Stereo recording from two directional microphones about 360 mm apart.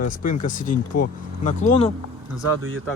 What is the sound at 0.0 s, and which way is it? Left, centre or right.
Speech, left.